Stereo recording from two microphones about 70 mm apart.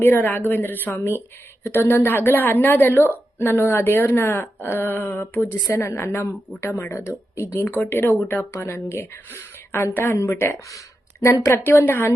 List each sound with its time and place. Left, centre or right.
0.0 s a woman's voice: left
5.7 s a woman's voice: left
8.3 s a woman's voice: left
10.7 s speech: left
11.5 s a woman's voice: left